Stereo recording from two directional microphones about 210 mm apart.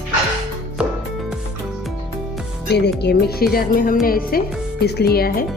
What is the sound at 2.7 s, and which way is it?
A woman's voice, 50° left (ahead or behind).